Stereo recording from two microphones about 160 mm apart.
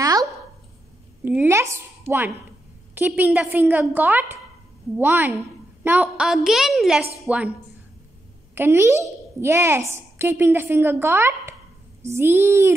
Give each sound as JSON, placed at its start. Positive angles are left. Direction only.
{"t": 0.0, "sound": "a sound", "side_deg": -20}
{"t": 1.2, "sound": "a child's voice", "side_deg": -10}
{"t": 8.5, "sound": "a child's voice", "side_deg": -15}